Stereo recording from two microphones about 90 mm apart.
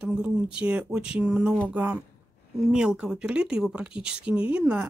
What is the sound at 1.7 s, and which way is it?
Speech, 20° right (ahead or behind).